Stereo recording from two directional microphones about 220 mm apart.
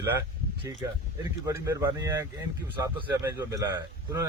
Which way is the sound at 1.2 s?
15° right (ahead or behind).